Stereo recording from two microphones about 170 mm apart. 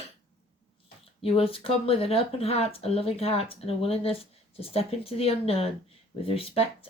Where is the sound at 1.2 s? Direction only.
35° left (ahead or behind).